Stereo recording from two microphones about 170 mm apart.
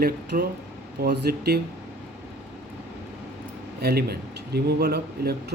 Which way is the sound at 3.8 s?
65° right (ahead or behind).